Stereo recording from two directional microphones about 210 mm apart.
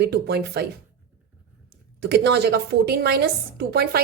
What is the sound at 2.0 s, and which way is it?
A woman's voice, 50° right (ahead or behind).